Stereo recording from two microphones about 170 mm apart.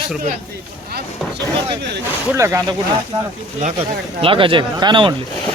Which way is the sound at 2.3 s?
15° right (ahead or behind).